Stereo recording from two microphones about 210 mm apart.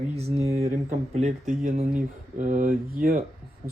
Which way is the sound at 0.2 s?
30° right (ahead or behind).